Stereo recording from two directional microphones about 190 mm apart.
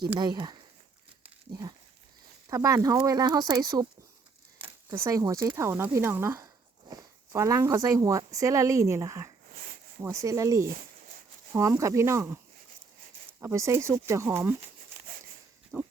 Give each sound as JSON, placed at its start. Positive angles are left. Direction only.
{"t": 0.2, "sound": "speech", "side_deg": -20}
{"t": 1.2, "sound": "a sound", "side_deg": -15}
{"t": 2.5, "sound": "speech", "side_deg": -15}
{"t": 13.4, "sound": "speech", "side_deg": -15}
{"t": 15.7, "sound": "pig", "side_deg": -5}